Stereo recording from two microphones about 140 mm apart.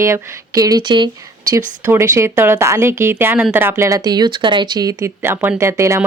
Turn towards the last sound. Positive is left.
turn(degrees=-20)  # may be behind; listen again after turning